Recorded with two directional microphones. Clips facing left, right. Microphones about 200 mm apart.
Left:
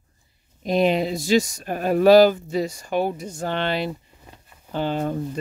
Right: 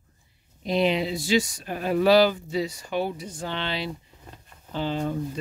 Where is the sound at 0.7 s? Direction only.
45° left (ahead or behind).